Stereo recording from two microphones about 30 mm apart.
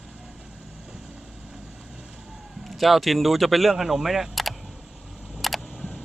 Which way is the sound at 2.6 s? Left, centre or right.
Centre.